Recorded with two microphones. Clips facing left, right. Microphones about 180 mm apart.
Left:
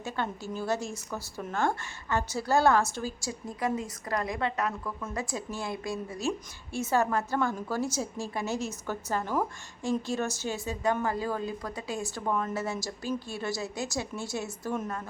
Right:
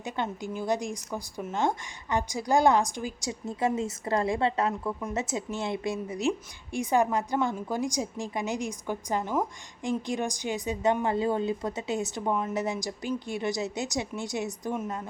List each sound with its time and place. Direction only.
0.0 s a woman's voice: 15° right (ahead or behind)